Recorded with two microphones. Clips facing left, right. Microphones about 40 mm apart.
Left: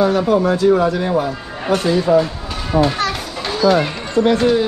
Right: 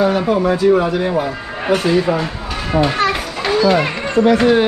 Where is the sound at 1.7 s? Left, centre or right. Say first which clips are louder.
Even; right.